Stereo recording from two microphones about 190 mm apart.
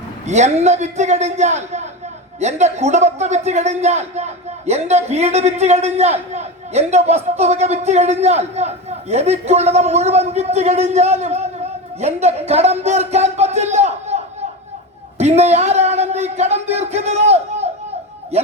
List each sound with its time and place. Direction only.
0.3 s a man's voice: 35° right (ahead or behind)
15.2 s a man's voice: 35° right (ahead or behind)